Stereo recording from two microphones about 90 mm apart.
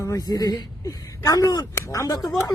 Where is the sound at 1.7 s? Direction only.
35° left (ahead or behind).